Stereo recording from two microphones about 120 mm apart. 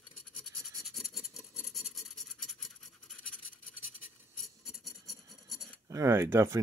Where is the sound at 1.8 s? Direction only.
Centre (ahead or behind).